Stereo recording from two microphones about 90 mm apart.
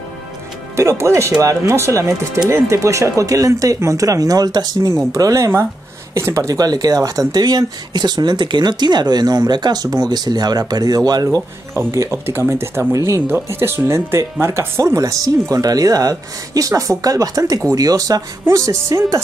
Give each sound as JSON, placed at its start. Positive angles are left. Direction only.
{"t": 0.7, "sound": "speech", "side_deg": -30}
{"t": 4.8, "sound": "speech", "side_deg": -35}
{"t": 11.7, "sound": "speech", "side_deg": -30}